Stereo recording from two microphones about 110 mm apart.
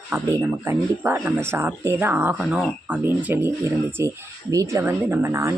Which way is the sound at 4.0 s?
25° right (ahead or behind).